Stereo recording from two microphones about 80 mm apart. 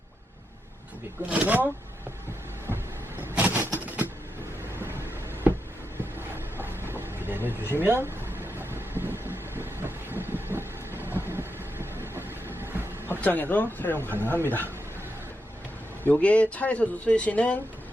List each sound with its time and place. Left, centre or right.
1.3 s speech: right
3.2 s vehicle: right
5.5 s a sound: right
7.7 s speech: right
8.5 s vehicle: right
13.2 s speech: left
16.0 s speech: centre